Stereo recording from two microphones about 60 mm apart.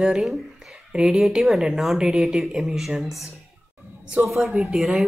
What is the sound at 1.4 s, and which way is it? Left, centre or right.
A woman's voice, centre.